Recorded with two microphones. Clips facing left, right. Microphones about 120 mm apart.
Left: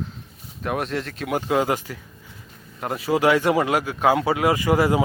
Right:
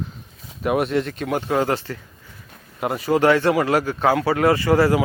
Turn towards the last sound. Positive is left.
turn(degrees=15)  # may be behind; listen again after turning